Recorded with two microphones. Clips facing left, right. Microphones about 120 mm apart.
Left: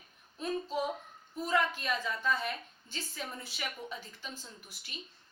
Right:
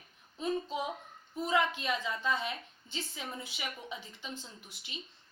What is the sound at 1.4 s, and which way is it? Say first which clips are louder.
A woman's voice: right 1 dB; 20° right (ahead or behind).